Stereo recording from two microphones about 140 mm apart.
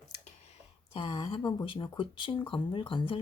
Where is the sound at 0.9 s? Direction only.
35° left (ahead or behind).